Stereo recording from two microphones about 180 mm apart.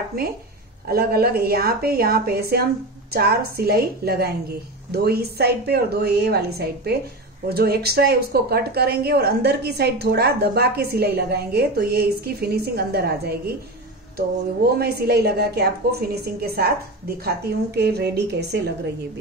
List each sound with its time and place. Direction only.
0.8 s a woman's voice: 55° right (ahead or behind)
14.8 s a woman's voice: 60° right (ahead or behind)